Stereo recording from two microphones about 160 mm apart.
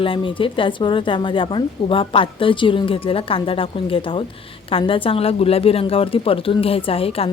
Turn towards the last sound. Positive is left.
turn(degrees=35)  # may be behind; listen again after turning